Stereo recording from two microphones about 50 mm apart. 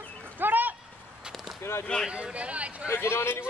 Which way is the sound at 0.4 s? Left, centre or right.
Right.